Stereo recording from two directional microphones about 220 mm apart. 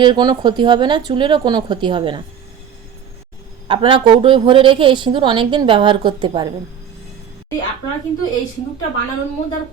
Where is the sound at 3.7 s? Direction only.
20° right (ahead or behind).